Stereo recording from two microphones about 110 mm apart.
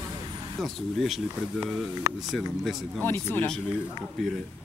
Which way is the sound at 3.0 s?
20° left (ahead or behind).